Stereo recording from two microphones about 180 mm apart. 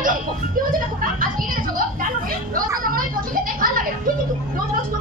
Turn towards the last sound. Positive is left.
turn(degrees=-50)  # may be behind; listen again after turning